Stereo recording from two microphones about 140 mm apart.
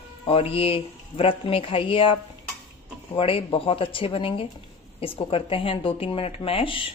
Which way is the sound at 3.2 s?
40° left (ahead or behind).